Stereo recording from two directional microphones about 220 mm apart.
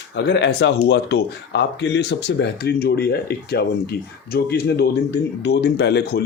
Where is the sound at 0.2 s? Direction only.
55° left (ahead or behind).